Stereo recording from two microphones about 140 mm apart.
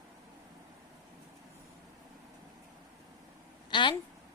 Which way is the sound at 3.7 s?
35° left (ahead or behind).